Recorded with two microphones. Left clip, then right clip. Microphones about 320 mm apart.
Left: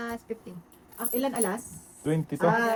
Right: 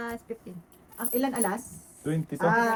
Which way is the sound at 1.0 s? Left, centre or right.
Centre.